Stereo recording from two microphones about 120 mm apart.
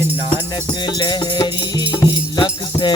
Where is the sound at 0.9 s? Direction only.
35° left (ahead or behind).